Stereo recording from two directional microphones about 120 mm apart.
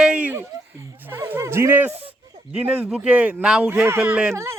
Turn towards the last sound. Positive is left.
turn(degrees=-10)  # may be behind; listen again after turning